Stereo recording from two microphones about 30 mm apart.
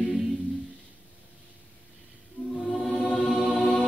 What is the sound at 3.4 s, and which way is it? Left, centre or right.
Chant, centre.